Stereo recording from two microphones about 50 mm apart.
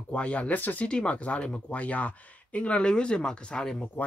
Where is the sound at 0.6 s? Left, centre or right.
Left.